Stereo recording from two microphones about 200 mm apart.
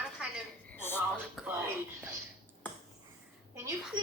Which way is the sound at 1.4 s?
10° right (ahead or behind).